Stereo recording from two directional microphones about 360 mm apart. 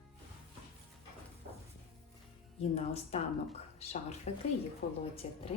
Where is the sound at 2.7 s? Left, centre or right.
Centre.